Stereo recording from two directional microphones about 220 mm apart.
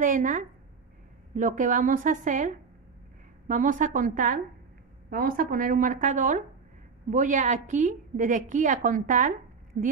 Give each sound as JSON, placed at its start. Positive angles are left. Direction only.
{"t": 0.0, "sound": "a woman's voice", "side_deg": -35}